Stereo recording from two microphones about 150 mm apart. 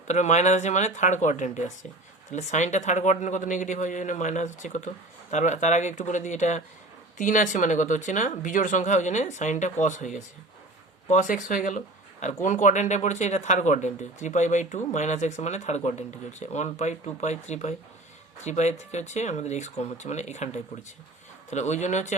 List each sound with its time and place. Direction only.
0.1 s speech: 50° left (ahead or behind)